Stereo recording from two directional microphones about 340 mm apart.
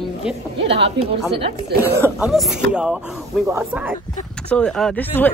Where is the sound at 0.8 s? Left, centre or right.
Centre.